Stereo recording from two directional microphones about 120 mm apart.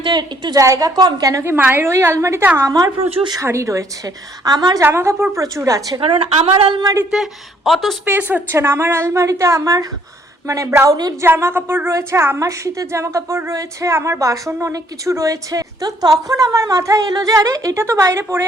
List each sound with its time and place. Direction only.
0.0 s a woman's voice: 35° right (ahead or behind)
4.9 s a woman's voice: 20° right (ahead or behind)
6.0 s speech: 50° right (ahead or behind)
6.8 s a woman's voice: 25° right (ahead or behind)
7.1 s speech: centre (ahead or behind)
8.0 s a woman's voice: 15° right (ahead or behind)